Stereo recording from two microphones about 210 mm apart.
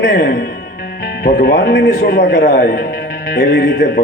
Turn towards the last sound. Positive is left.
turn(degrees=55)  # may be behind; listen again after turning